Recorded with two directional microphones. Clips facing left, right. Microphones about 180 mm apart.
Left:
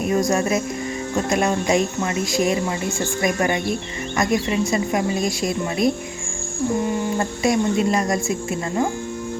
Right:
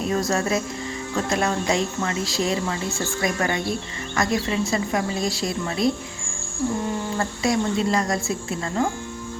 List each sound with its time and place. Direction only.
0.0 s speech: 15° left (ahead or behind)
7.0 s speech: 20° left (ahead or behind)